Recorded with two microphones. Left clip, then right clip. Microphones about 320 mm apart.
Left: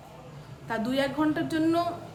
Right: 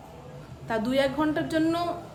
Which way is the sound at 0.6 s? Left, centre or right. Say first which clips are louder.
Right 3 dB; centre.